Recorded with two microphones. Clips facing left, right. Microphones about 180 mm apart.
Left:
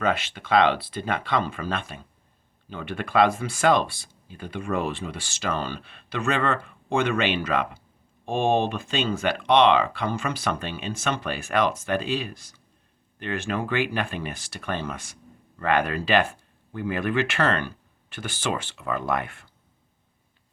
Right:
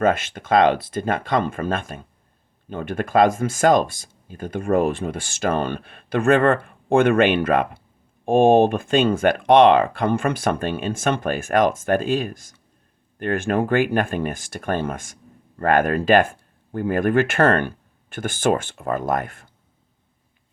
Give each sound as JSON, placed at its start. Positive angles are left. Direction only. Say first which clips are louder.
{"t": 0.0, "sound": "speech", "louder": "right 6 dB", "side_deg": -50}